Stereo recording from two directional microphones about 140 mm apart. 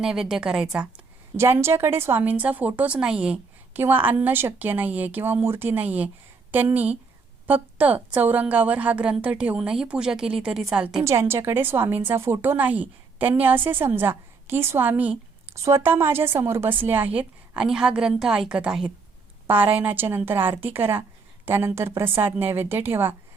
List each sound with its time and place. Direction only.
0.0 s a woman's voice: 5° right (ahead or behind)
11.0 s a woman's voice: 20° right (ahead or behind)